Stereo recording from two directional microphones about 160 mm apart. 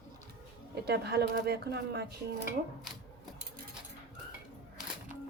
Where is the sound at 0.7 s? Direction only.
90° right.